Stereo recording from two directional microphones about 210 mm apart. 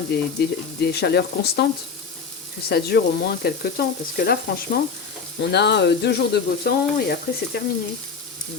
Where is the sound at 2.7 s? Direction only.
50° left (ahead or behind).